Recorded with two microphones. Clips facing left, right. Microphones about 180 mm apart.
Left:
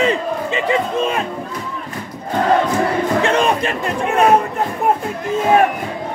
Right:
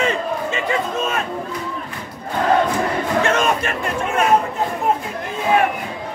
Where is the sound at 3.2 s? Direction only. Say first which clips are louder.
Left 2 dB; 30° left (ahead or behind).